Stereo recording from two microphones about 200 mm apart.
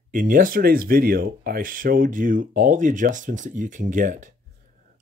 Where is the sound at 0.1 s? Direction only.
45° right (ahead or behind).